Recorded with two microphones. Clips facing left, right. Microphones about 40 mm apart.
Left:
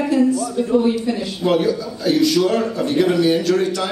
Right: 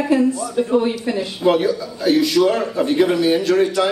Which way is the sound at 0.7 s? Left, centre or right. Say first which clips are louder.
Left 3 dB; right.